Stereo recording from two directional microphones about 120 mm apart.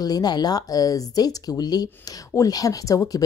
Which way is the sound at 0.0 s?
35° left (ahead or behind).